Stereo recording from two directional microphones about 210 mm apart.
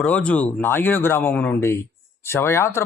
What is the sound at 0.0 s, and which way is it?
Speech, 5° left (ahead or behind).